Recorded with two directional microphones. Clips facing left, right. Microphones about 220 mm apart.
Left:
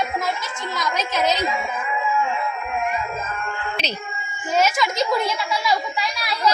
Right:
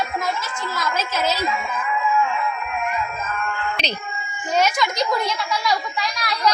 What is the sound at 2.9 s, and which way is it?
Music, 25° left (ahead or behind).